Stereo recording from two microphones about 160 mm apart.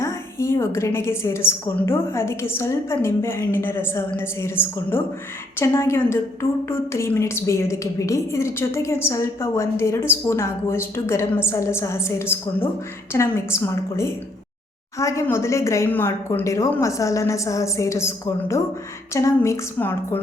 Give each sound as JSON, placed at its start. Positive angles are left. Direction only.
{"t": 0.0, "sound": "a woman's voice", "side_deg": 15}